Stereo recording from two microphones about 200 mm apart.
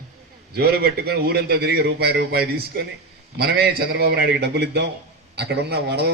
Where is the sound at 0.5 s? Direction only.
50° right (ahead or behind).